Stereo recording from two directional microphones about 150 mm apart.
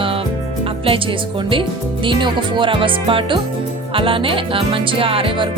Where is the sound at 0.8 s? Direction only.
35° right (ahead or behind).